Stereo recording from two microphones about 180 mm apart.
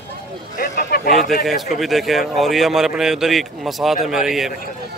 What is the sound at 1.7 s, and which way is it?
Speech, centre (ahead or behind).